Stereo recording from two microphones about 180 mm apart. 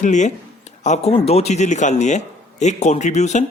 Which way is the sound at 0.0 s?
40° left (ahead or behind).